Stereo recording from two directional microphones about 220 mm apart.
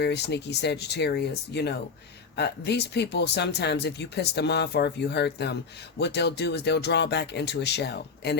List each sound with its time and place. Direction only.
0.0 s speech: 50° left (ahead or behind)